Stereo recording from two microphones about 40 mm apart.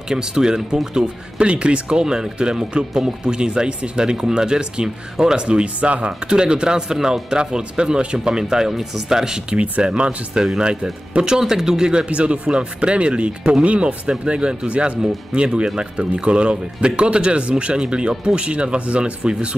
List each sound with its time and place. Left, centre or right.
0.1 s speech: centre; by 6.1 s right
6.2 s speech: right
9.6 s speech: right
11.3 s speech: centre
12.1 s speech: right